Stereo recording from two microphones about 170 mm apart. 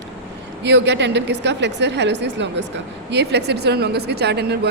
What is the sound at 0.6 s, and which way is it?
A woman's voice, 90° right.